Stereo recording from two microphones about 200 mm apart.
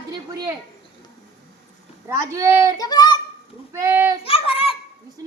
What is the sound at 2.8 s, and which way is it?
Child singing, 20° left (ahead or behind).